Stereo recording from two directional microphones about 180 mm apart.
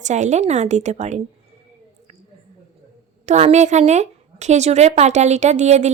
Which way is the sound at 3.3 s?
40° right (ahead or behind).